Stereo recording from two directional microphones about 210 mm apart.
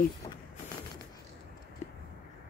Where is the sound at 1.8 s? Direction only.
35° left (ahead or behind).